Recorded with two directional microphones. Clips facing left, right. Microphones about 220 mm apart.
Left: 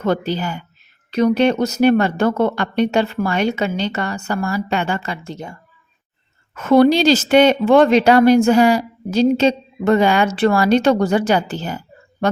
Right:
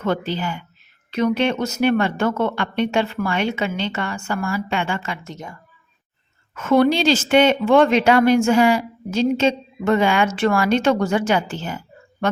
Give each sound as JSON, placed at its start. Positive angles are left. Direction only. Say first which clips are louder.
{"t": 0.0, "sound": "speech", "louder": "left 3 dB", "side_deg": 40}